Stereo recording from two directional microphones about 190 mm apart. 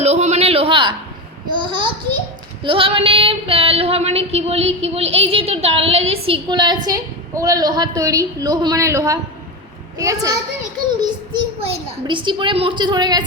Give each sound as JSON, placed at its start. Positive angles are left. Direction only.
{"t": 0.0, "sound": "a sound", "side_deg": -35}
{"t": 1.5, "sound": "a child's voice", "side_deg": -25}
{"t": 2.6, "sound": "female singing", "side_deg": -30}
{"t": 6.8, "sound": "a woman's voice", "side_deg": -15}